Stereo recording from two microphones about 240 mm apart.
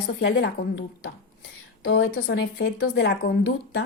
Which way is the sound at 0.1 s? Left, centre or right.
Left.